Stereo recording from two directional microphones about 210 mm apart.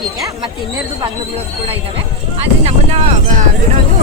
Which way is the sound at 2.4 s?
30° right (ahead or behind).